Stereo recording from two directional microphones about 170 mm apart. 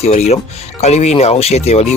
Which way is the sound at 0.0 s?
40° left (ahead or behind).